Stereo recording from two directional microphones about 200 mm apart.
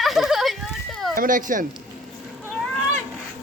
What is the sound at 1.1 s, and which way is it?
Speech, 40° right (ahead or behind).